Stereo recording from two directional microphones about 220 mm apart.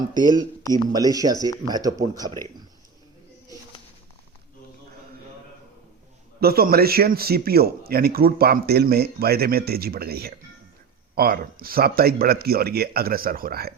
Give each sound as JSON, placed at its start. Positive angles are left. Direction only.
{"t": 0.9, "sound": "speech", "side_deg": -15}
{"t": 6.4, "sound": "speech", "side_deg": -45}